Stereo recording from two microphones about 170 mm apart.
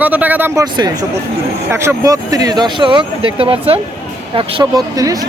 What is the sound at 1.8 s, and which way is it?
Speech, 20° right (ahead or behind).